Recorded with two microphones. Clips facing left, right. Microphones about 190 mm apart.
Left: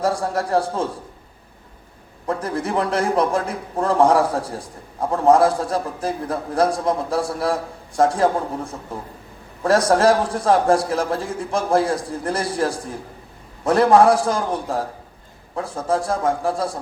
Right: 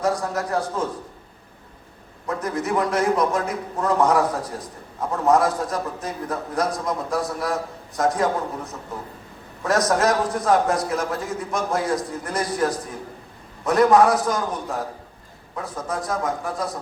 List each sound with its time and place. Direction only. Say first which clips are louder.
0.0 s a man's voice: left 2 dB; 30° left (ahead or behind)
2.2 s a man's voice: left 2 dB; 30° left (ahead or behind)